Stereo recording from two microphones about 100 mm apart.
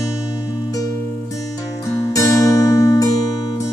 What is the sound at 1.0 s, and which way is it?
Music, 20° left (ahead or behind).